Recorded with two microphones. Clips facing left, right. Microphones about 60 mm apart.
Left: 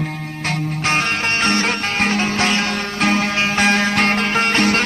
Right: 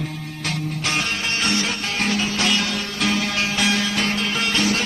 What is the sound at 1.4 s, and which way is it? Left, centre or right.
Music, left.